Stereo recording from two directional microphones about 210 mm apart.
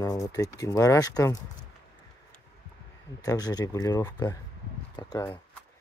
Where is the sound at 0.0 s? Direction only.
15° left (ahead or behind).